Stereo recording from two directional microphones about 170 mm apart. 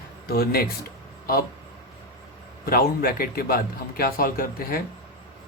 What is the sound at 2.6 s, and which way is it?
Speech, 60° left (ahead or behind).